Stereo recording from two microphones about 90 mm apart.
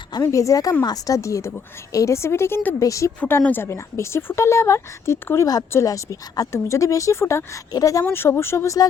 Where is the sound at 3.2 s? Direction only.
20° left (ahead or behind); by 8.0 s 40° left (ahead or behind).